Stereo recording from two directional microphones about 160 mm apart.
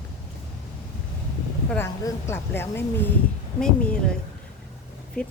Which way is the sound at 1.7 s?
15° left (ahead or behind).